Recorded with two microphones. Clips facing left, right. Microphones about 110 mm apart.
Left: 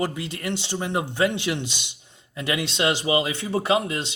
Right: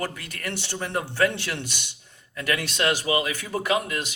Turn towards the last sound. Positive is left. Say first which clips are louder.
# left 3 dB
turn(degrees=25)  # may be behind; listen again after turning